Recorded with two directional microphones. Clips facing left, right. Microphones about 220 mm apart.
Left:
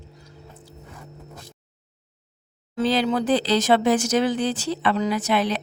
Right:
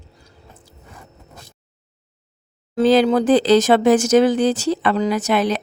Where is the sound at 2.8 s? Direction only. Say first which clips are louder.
Right 7 dB; 45° right (ahead or behind).